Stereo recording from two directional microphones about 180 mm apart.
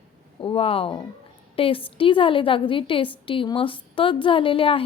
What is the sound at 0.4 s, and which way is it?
A woman's voice, 30° left (ahead or behind).